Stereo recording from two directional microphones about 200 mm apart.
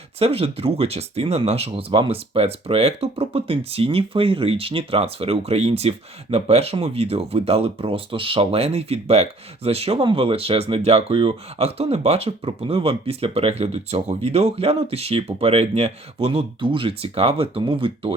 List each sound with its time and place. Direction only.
0.2 s speech: 30° right (ahead or behind)